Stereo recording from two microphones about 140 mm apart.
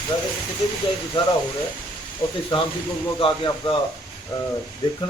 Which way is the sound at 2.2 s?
35° left (ahead or behind).